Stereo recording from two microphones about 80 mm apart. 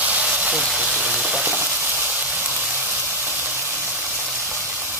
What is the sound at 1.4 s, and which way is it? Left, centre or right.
Frying, right.